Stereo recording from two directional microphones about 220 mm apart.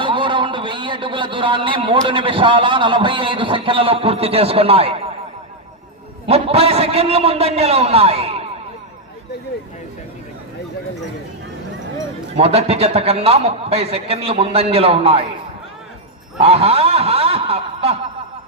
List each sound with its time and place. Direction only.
0.0 s a man's voice: 20° right (ahead or behind)
6.2 s a man's voice: 25° right (ahead or behind)
12.4 s a man's voice: 25° right (ahead or behind)
16.4 s speech: 25° right (ahead or behind)